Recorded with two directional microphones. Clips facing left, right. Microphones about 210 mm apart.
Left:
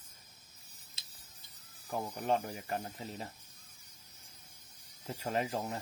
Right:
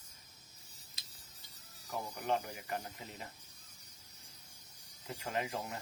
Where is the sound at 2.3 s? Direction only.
35° left (ahead or behind).